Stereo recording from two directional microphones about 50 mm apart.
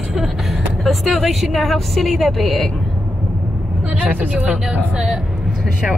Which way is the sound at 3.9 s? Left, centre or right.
Right.